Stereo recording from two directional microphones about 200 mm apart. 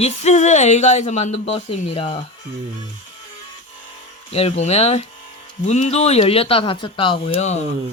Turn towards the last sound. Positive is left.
turn(degrees=30)  # may be behind; listen again after turning